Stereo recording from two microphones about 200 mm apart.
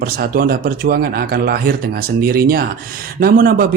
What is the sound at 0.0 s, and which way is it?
A man's voice, 50° right (ahead or behind).